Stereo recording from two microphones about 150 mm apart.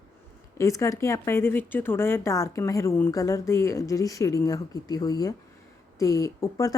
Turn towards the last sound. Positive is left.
turn(degrees=20)  # may be behind; listen again after turning